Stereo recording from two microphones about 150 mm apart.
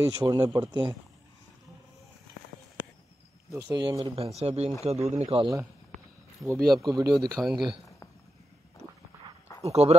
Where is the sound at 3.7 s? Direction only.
30° right (ahead or behind); by 5.4 s 50° right (ahead or behind).